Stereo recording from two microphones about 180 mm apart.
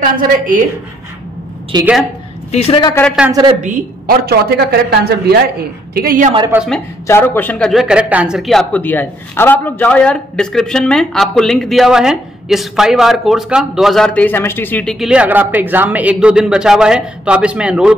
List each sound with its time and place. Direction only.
0.0 s a woman's voice: 50° right (ahead or behind)
1.7 s a woman's voice: 25° right (ahead or behind)
2.5 s a woman's voice: 35° left (ahead or behind)
3.3 s a woman's voice: 20° right (ahead or behind)
3.6 s speech: 50° right (ahead or behind)
6.5 s a man's voice: 5° right (ahead or behind)
7.1 s a man's voice: 10° left (ahead or behind)
15.0 s a man's voice: 5° right (ahead or behind)